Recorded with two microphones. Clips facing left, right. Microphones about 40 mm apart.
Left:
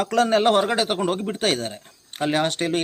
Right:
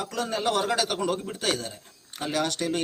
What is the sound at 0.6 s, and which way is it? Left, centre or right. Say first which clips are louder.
A man's voice: left 4 dB; left.